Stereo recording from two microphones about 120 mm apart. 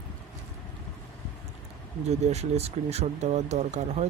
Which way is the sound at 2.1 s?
65° right (ahead or behind).